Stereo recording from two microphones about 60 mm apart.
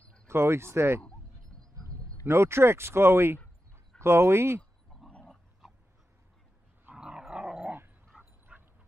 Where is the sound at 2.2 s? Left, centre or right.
Right.